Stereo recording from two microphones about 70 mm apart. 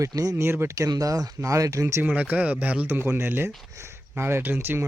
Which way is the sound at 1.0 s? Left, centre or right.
Right.